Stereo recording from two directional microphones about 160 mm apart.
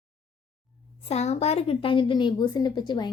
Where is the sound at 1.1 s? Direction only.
40° left (ahead or behind).